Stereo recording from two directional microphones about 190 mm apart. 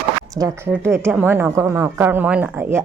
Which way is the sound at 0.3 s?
20° right (ahead or behind).